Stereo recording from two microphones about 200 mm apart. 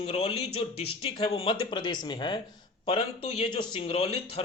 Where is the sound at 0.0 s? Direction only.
30° left (ahead or behind).